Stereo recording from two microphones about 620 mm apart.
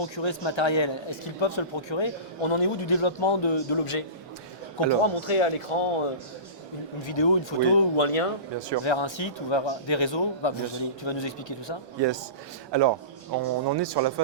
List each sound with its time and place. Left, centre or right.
0.0 s a man's voice: left
5.2 s a man's voice: left
11.9 s a man's voice: right